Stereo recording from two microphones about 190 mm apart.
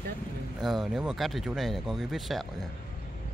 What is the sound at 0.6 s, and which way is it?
Speech, centre (ahead or behind).